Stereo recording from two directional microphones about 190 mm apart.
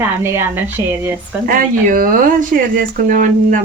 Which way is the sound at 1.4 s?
45° right (ahead or behind).